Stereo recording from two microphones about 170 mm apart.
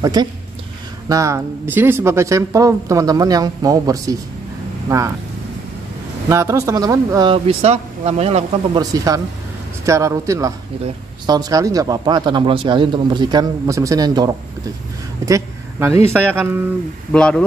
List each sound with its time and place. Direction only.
0.0 s speech: 25° right (ahead or behind)
6.2 s speech: 15° right (ahead or behind); by 8.5 s 40° right (ahead or behind)
8.7 s a man's voice: 20° right (ahead or behind)
17.1 s speech: 5° left (ahead or behind)